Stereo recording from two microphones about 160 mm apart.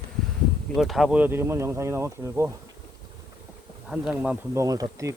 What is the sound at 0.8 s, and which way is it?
Speech, centre (ahead or behind).